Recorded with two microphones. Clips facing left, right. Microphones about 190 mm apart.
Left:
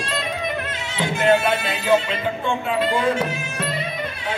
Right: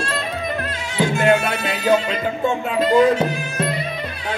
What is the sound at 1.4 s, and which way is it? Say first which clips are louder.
Music: right 1 dB; 45° right (ahead or behind).